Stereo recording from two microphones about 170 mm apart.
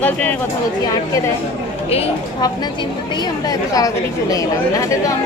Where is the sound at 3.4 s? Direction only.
20° left (ahead or behind).